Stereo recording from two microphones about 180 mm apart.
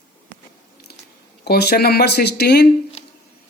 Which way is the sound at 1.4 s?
60° left (ahead or behind).